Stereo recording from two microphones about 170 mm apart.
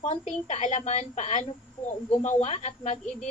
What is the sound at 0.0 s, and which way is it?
A woman's voice, 40° left (ahead or behind).